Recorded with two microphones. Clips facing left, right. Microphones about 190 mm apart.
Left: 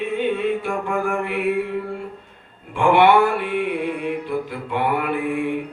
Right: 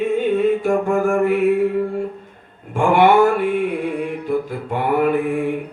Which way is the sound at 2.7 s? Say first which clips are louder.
Right 1 dB; 45° right (ahead or behind).